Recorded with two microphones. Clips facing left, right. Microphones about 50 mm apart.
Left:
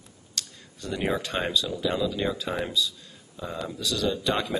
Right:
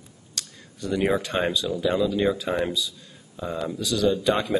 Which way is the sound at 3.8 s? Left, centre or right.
Centre.